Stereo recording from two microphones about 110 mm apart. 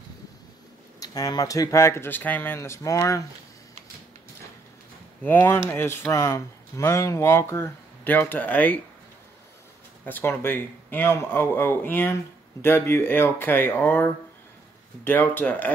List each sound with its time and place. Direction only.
0.9 s speech: 35° left (ahead or behind)
5.2 s speech: 15° left (ahead or behind)
10.0 s speech: 20° left (ahead or behind)